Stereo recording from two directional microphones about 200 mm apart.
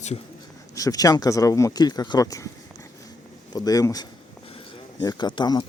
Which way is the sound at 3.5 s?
20° left (ahead or behind).